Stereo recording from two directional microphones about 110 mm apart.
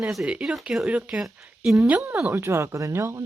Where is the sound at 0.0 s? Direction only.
5° right (ahead or behind).